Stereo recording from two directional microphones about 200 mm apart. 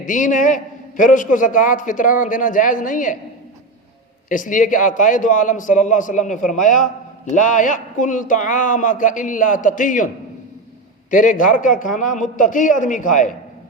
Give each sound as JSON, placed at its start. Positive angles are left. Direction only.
{"t": 0.0, "sound": "a man's voice", "side_deg": 40}
{"t": 4.3, "sound": "a man's voice", "side_deg": 40}
{"t": 11.1, "sound": "a man's voice", "side_deg": 40}